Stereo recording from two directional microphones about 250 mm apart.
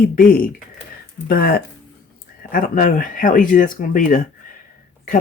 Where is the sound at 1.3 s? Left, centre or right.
Left.